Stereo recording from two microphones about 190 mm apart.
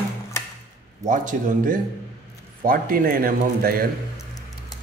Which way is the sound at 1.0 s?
45° right (ahead or behind).